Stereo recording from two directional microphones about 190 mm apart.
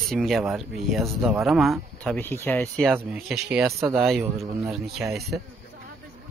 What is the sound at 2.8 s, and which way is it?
Speech, centre (ahead or behind).